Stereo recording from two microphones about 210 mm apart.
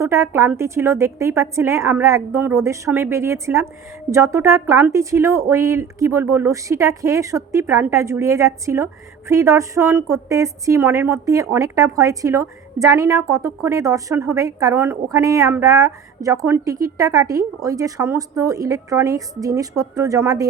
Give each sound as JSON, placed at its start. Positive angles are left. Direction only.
{"t": 0.0, "sound": "speech", "side_deg": -15}